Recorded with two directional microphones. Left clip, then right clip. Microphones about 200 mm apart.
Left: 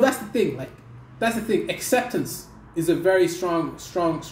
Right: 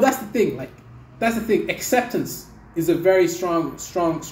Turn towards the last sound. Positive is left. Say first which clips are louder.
# right 2 dB
turn(degrees=10)  # may be behind; listen again after turning